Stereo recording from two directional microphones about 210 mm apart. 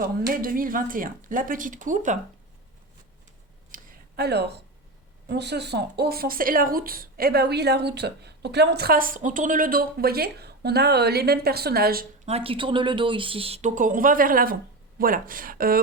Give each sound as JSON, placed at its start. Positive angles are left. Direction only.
{"t": 0.0, "sound": "speech", "side_deg": -45}
{"t": 3.7, "sound": "a sound", "side_deg": -45}
{"t": 5.3, "sound": "speech", "side_deg": -55}
{"t": 12.2, "sound": "speech", "side_deg": -30}